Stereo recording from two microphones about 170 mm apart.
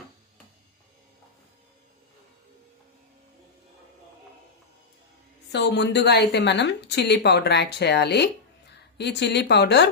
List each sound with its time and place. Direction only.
5.5 s a woman's voice: 85° left